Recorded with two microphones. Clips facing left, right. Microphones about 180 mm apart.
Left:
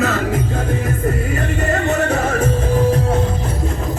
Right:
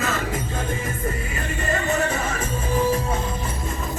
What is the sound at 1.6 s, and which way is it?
Music, 65° left (ahead or behind).